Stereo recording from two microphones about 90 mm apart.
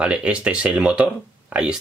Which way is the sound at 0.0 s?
10° right (ahead or behind).